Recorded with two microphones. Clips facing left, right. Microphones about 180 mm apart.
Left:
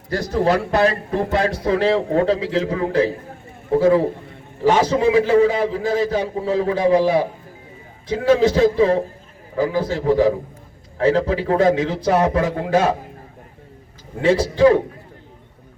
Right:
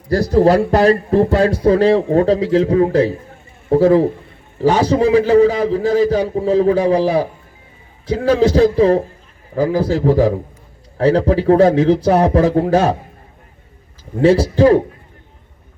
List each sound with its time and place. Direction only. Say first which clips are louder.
0.1 s speech: right 6 dB; 35° right (ahead or behind)
14.2 s speech: right 3 dB; 40° right (ahead or behind)